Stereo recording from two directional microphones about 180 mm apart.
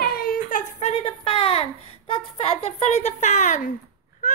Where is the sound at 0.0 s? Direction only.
55° left (ahead or behind).